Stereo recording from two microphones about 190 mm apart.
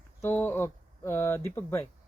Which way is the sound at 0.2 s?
10° left (ahead or behind).